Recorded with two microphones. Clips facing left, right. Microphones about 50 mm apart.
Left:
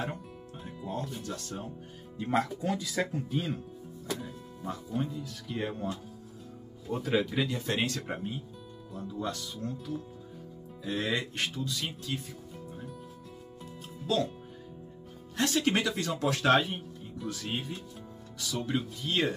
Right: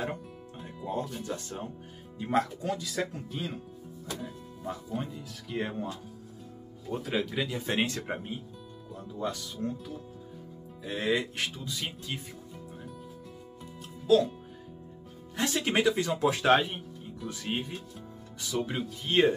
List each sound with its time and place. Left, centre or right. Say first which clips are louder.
0.8 s speech: right 3 dB; right
2.1 s speech: right 1 dB; centre
6.9 s speech: left 2 dB; centre
7.6 s speech: right 1 dB; centre
10.8 s speech: right 2 dB; centre
11.5 s speech: left 2 dB; centre
14.0 s speech: right 7 dB; centre
15.3 s speech: even; centre